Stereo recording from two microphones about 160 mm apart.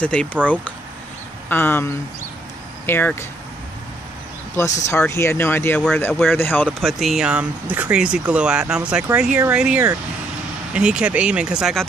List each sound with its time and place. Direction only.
0.0 s speech: 5° left (ahead or behind)
1.5 s speech: 10° left (ahead or behind)
4.6 s speech: 15° left (ahead or behind); by 11.8 s 5° right (ahead or behind)